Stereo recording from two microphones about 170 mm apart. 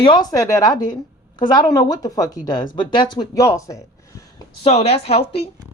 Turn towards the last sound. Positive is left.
turn(degrees=35)  # may be behind; listen again after turning